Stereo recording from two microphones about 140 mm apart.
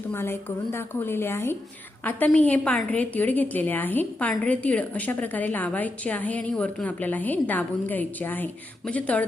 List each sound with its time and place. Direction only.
0.1 s a woman's voice: 15° left (ahead or behind)